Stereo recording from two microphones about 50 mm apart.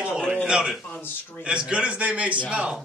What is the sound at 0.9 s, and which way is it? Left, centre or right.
Speech, left.